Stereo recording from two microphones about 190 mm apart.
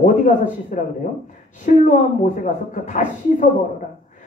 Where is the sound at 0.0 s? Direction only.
40° left (ahead or behind).